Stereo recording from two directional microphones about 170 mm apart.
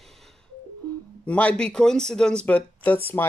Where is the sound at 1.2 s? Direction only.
10° left (ahead or behind).